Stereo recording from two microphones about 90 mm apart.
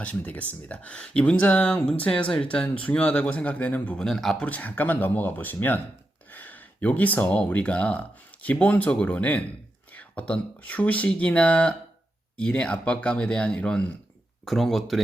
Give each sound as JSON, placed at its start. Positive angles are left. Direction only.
{"t": 0.0, "sound": "speech", "side_deg": 15}
{"t": 4.0, "sound": "speech", "side_deg": 5}
{"t": 4.4, "sound": "speech", "side_deg": 20}